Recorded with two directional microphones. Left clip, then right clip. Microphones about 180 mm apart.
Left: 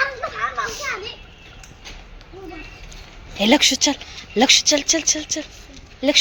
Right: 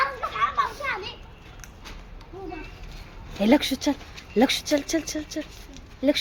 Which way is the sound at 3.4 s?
5° right (ahead or behind).